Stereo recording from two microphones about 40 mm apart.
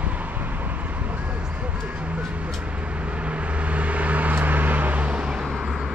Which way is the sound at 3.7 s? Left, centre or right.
Right.